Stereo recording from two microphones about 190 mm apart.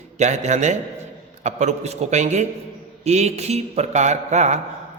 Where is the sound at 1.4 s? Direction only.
35° right (ahead or behind).